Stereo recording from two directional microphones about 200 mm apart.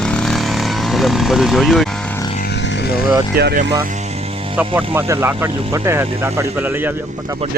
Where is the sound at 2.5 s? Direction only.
60° left (ahead or behind).